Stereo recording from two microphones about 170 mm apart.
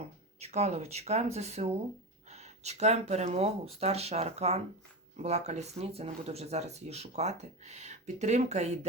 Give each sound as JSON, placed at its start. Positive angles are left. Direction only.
{"t": 0.0, "sound": "speech", "side_deg": -40}